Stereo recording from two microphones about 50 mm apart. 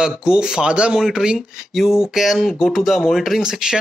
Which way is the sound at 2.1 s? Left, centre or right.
Centre.